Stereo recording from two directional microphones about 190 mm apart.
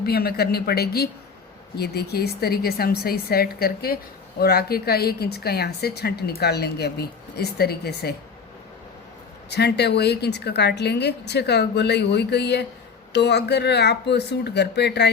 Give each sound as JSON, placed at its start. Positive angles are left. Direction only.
{"t": 0.0, "sound": "a woman's voice", "side_deg": 55}
{"t": 9.5, "sound": "a woman's voice", "side_deg": 60}